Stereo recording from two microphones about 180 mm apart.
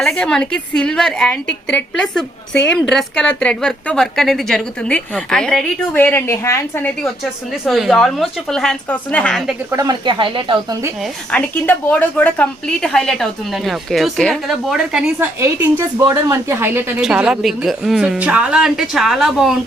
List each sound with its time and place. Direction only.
0.0 s a woman's voice: 5° left (ahead or behind)
7.5 s a woman's voice: centre (ahead or behind)
9.7 s speech: 25° right (ahead or behind)
11.0 s a woman's voice: 5° left (ahead or behind)